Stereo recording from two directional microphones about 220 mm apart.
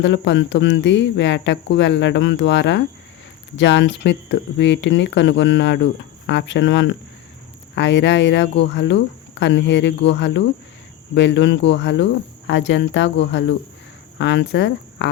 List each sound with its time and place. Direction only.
0.0 s speech: 55° left (ahead or behind)